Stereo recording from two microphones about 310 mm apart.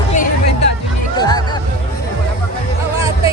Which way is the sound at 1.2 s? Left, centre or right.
Centre.